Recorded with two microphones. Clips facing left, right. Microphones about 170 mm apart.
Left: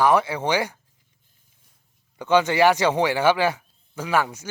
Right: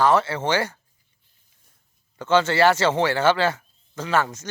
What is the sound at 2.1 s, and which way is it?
Speech, 15° left (ahead or behind).